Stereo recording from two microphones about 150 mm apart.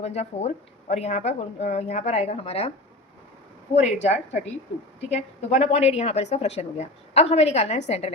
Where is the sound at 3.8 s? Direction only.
50° left (ahead or behind).